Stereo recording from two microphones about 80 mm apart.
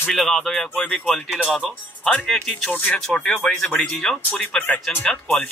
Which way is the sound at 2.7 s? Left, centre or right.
Centre.